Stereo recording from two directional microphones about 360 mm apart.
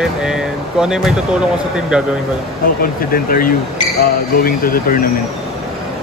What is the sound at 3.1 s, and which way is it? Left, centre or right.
Speech, left.